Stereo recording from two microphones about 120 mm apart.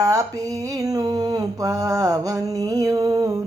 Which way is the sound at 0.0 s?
30° right (ahead or behind).